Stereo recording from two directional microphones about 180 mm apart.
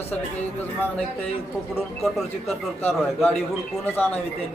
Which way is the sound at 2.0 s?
Centre (ahead or behind).